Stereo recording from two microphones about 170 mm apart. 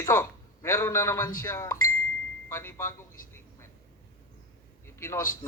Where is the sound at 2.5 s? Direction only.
15° left (ahead or behind).